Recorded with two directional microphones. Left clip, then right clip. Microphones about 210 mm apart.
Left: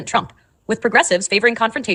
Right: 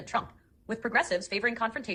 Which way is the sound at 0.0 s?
50° left (ahead or behind).